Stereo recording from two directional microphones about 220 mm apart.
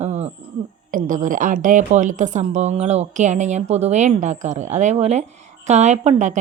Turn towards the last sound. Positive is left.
turn(degrees=-35)  # may be behind; listen again after turning